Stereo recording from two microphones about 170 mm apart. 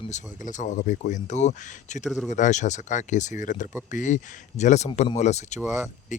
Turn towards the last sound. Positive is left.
turn(degrees=45)  # may be behind; listen again after turning